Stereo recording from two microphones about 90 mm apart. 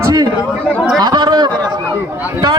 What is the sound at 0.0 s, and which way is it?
Chatter, 45° right (ahead or behind).